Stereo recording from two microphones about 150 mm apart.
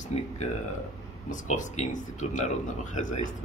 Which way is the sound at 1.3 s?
55° left (ahead or behind).